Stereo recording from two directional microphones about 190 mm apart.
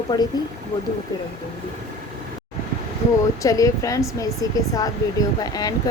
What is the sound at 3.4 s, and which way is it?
Speech, 15° left (ahead or behind).